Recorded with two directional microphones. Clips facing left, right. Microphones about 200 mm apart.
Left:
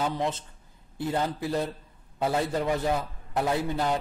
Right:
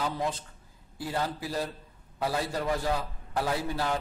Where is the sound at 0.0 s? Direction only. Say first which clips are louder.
Left 3 dB; 25° left (ahead or behind).